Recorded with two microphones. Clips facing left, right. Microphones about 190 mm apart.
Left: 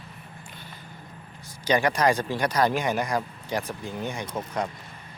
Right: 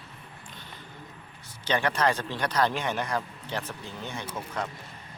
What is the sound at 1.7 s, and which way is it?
Speech, 10° left (ahead or behind).